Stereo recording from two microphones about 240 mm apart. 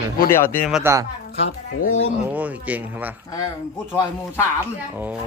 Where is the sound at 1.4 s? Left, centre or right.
Left.